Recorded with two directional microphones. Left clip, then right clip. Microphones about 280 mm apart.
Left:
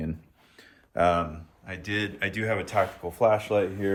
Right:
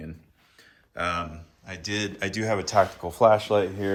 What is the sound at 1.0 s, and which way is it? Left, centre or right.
Speech, centre.